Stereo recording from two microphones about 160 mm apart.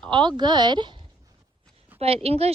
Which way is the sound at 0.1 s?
30° right (ahead or behind).